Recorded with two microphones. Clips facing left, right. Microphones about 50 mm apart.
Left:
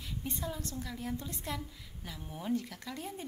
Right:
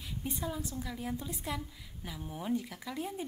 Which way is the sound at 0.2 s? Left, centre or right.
Centre.